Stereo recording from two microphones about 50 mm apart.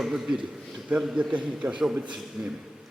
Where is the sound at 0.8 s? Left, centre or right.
Right.